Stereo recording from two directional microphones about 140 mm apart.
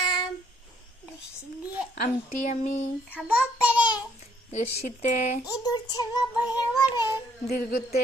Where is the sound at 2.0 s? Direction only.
60° left (ahead or behind).